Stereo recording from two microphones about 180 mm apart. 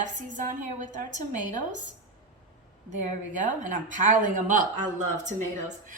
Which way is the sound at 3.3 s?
45° right (ahead or behind).